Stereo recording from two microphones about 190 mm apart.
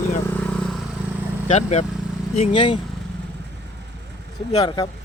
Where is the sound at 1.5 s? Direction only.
35° left (ahead or behind).